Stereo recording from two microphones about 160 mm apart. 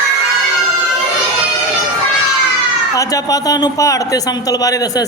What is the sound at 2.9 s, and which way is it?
A man's voice, 20° left (ahead or behind).